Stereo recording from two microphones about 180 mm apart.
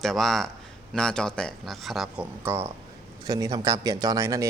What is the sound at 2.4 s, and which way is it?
Speech, 15° right (ahead or behind).